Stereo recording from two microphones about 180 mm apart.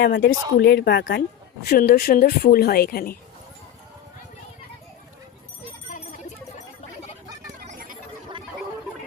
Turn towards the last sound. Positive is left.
turn(degrees=-50)  # may be behind; listen again after turning